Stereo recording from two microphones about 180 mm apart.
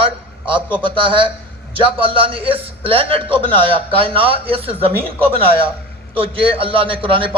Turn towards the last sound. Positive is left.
turn(degrees=-30)  # may be behind; listen again after turning